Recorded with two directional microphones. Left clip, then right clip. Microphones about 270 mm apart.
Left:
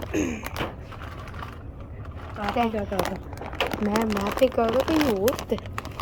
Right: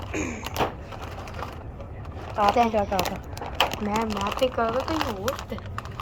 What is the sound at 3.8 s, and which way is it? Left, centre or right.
Speech, left.